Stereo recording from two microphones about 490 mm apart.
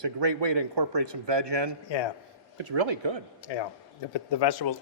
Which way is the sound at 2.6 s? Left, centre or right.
Right.